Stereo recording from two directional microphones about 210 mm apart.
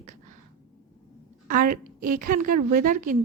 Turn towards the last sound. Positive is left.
turn(degrees=-40)  # may be behind; listen again after turning